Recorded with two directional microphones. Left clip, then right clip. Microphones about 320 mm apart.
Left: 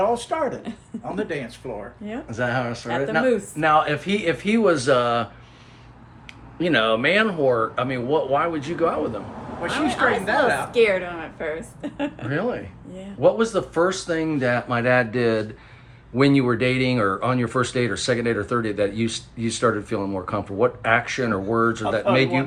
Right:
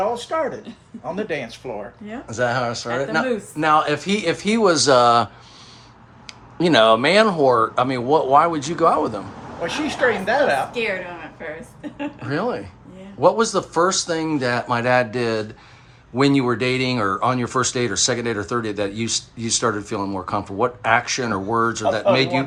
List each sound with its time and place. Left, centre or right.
0.1 s speech: centre
10.7 s speech: centre
12.3 s speech: centre